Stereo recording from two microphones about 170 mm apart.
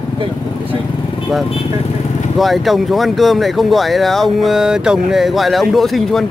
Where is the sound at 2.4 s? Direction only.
Centre (ahead or behind).